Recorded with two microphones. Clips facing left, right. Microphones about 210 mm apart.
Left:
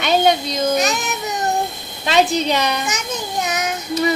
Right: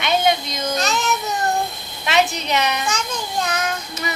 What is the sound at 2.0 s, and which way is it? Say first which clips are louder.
Speech: left 4 dB; 35° left (ahead or behind).